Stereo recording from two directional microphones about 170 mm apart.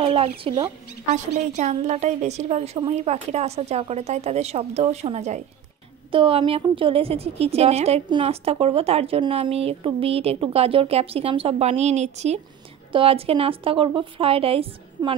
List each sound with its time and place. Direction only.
0.0 s speech: 35° right (ahead or behind)
1.1 s a woman's voice: 40° right (ahead or behind)